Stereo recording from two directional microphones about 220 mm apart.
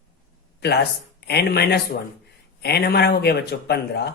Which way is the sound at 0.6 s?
45° left (ahead or behind).